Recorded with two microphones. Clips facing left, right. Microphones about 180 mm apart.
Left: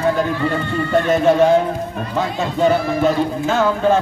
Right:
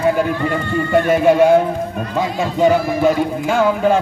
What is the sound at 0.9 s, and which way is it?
Speech, 10° right (ahead or behind).